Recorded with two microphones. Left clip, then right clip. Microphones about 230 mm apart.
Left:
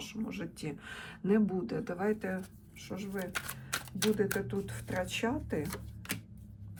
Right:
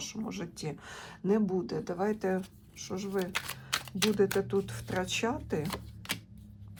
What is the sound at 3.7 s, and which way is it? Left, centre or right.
Speech, right.